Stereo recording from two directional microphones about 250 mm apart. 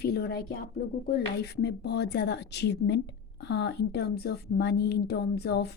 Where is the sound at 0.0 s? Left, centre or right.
Left.